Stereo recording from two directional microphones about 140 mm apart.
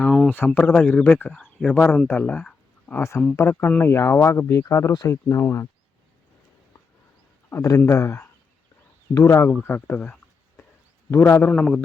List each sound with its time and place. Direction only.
0.0 s a sound: centre (ahead or behind)
0.3 s speech: 10° left (ahead or behind)
7.5 s speech: 25° left (ahead or behind)
11.5 s a man's voice: 5° left (ahead or behind)